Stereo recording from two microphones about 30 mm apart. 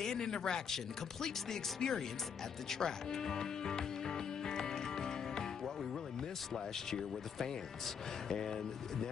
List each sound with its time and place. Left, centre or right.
0.0 s speech: centre
6.5 s speech: centre